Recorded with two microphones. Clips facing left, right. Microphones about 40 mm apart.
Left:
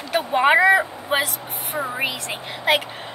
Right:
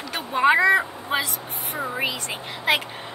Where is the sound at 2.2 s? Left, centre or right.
Centre.